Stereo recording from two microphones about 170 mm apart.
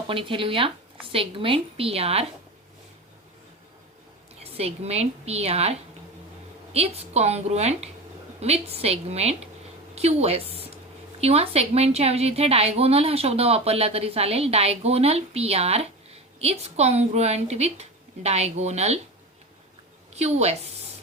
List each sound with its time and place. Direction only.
0.1 s a woman's voice: 30° right (ahead or behind)
4.4 s a woman's voice: 35° right (ahead or behind)
6.7 s a woman's voice: 35° right (ahead or behind)
20.1 s a woman's voice: 40° right (ahead or behind)